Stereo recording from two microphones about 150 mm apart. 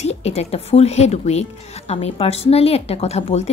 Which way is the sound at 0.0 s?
45° left (ahead or behind).